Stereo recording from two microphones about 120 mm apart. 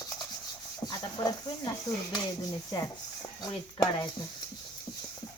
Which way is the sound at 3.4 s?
35° left (ahead or behind).